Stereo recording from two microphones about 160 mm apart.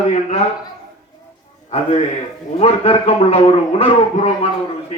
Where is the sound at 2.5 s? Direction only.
40° left (ahead or behind).